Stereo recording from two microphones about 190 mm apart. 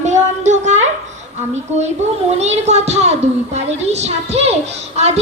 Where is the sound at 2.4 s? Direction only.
35° right (ahead or behind).